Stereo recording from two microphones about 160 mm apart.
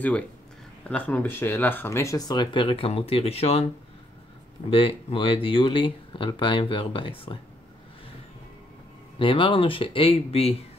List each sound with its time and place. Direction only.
0.8 s speech: 10° left (ahead or behind); by 3.6 s 40° left (ahead or behind)
4.6 s speech: 35° left (ahead or behind)
9.2 s speech: 30° left (ahead or behind)